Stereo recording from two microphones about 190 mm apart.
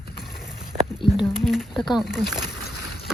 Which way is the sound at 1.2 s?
Centre (ahead or behind).